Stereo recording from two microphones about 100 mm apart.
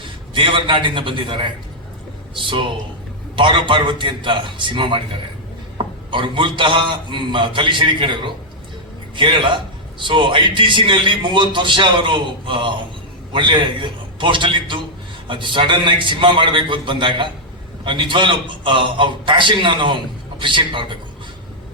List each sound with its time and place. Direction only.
0.0 s a man's voice: 55° right (ahead or behind)